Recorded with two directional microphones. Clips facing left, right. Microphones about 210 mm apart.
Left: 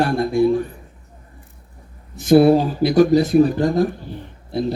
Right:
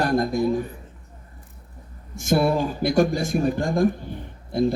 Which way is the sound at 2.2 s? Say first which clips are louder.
Left 8 dB; 50° right (ahead or behind).